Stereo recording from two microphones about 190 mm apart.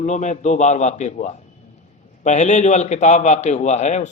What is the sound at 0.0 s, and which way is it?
A man's voice, 40° left (ahead or behind).